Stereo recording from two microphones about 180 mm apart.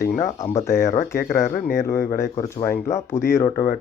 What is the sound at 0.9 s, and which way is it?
Speech, 45° left (ahead or behind).